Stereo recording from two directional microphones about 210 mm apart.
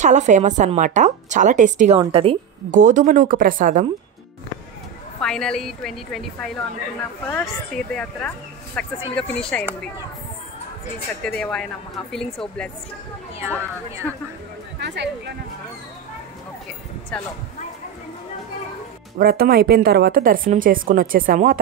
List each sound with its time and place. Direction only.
0.0 s a woman's voice: 35° right (ahead or behind)
2.0 s a woman's voice: 25° right (ahead or behind)
2.7 s a woman's voice: 40° right (ahead or behind)
5.2 s a woman's voice: 5° left (ahead or behind)
11.2 s a woman's voice: 5° left (ahead or behind)
14.8 s speech: 55° right (ahead or behind)
17.1 s a woman's voice: 5° left (ahead or behind)
19.1 s speech: 45° right (ahead or behind)